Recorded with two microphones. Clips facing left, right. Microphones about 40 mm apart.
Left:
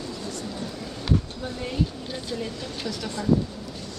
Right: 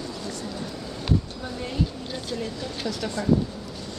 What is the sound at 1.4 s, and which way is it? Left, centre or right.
Vehicle, centre.